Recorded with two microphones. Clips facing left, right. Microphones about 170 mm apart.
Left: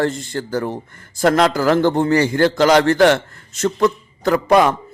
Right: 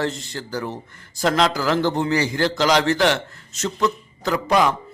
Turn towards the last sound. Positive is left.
turn(degrees=60)  # may be behind; listen again after turning